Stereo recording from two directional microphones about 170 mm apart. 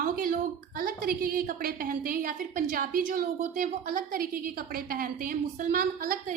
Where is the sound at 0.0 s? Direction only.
55° right (ahead or behind).